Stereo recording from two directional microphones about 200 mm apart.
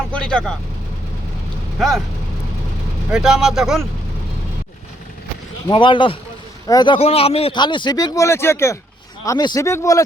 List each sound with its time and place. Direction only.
0.1 s speech: 5° left (ahead or behind)
3.1 s speech: 5° right (ahead or behind)
5.7 s speech: 25° left (ahead or behind)